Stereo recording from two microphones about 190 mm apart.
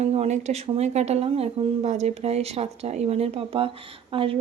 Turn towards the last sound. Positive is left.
turn(degrees=-30)  # may be behind; listen again after turning